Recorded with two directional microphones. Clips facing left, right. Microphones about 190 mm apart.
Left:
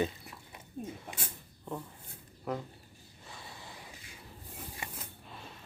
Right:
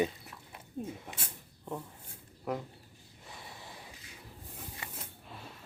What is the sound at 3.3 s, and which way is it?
Snort, 20° right (ahead or behind).